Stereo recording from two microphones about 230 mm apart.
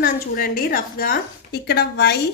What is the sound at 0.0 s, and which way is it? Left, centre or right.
A woman's voice, left.